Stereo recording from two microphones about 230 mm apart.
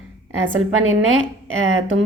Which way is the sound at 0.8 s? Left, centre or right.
Right.